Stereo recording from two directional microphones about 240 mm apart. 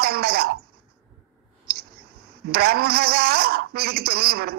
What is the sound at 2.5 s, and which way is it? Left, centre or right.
A woman's voice, right.